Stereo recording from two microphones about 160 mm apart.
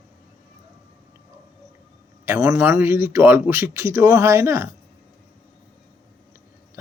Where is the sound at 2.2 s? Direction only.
10° right (ahead or behind).